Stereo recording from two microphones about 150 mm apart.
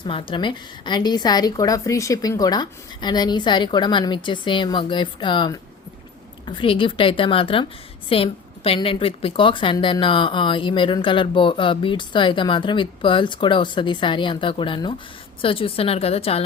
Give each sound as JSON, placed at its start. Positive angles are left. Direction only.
{"t": 0.0, "sound": "a woman's voice", "side_deg": 35}